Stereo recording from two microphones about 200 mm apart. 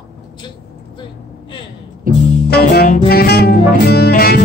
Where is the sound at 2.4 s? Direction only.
50° left (ahead or behind).